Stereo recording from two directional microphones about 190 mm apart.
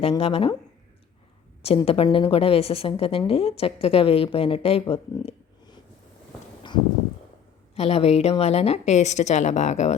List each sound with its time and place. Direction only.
0.2 s a woman's voice: 30° left (ahead or behind)
1.6 s a woman's voice: 30° left (ahead or behind)
7.8 s a woman's voice: 35° left (ahead or behind)